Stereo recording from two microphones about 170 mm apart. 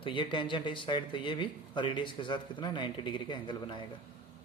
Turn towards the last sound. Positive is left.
turn(degrees=25)  # may be behind; listen again after turning